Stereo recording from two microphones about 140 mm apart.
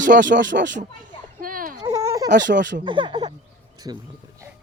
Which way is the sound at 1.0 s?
90° right.